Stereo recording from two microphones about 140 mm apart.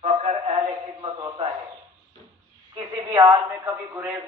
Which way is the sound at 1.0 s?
40° right (ahead or behind).